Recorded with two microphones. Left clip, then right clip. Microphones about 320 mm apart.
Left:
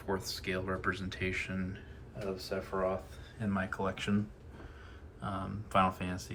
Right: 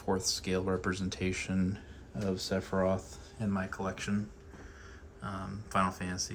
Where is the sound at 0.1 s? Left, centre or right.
Centre.